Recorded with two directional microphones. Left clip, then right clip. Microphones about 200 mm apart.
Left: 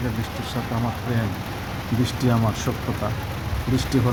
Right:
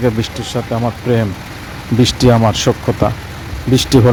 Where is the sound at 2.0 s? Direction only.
40° right (ahead or behind).